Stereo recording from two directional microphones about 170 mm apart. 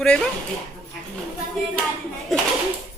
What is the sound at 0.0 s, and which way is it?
Speech, 5° left (ahead or behind).